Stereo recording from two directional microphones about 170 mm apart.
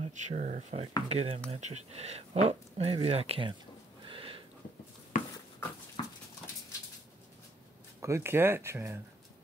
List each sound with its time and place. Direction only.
0.0 s speech: 40° right (ahead or behind)
4.0 s a sound: 30° right (ahead or behind)
5.1 s dog: 50° left (ahead or behind)
6.0 s dog: 25° left (ahead or behind)
8.0 s speech: 15° right (ahead or behind)